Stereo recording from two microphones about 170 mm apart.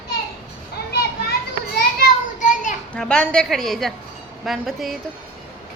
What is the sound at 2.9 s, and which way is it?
A woman's voice, 5° left (ahead or behind).